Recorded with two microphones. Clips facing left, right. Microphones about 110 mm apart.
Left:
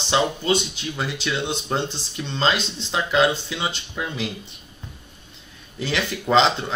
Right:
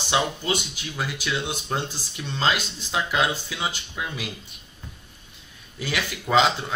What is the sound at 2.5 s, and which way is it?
Speech, 30° left (ahead or behind).